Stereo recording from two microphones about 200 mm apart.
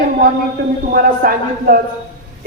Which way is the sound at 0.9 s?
45° right (ahead or behind).